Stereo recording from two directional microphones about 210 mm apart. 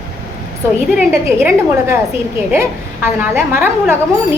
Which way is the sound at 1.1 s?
10° right (ahead or behind).